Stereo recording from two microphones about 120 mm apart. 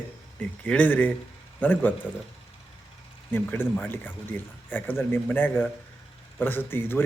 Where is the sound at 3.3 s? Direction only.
20° left (ahead or behind).